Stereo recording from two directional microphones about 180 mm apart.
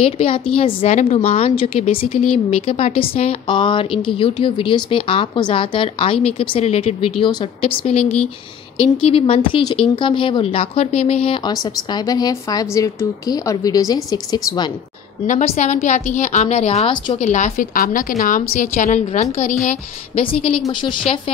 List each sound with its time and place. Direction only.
0.0 s a woman's voice: 30° left (ahead or behind)
15.2 s a woman's voice: 45° left (ahead or behind)